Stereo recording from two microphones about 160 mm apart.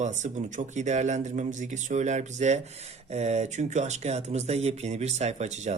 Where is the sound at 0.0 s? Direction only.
45° right (ahead or behind).